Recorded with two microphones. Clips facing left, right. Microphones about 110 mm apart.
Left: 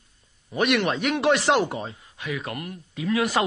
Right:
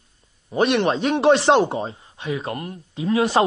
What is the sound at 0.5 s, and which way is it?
Speech, 30° right (ahead or behind).